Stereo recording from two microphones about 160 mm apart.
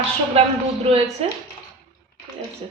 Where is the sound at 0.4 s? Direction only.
35° right (ahead or behind).